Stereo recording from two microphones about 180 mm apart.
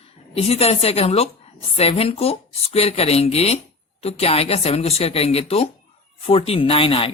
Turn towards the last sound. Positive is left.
turn(degrees=30)  # may be behind; listen again after turning